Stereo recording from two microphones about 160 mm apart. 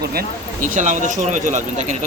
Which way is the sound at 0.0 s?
70° right (ahead or behind).